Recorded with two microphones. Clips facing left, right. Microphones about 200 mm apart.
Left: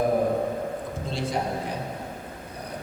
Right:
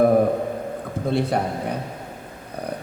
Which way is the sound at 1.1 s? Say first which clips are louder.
Right 8 dB; 60° right (ahead or behind).